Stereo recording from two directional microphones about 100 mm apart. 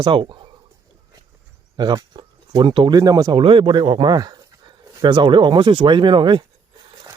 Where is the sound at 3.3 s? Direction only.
60° right (ahead or behind).